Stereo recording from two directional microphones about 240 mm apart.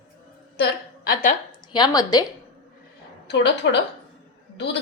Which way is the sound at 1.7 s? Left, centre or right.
Centre.